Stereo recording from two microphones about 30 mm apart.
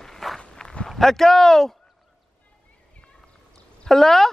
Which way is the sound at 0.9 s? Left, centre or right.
Centre.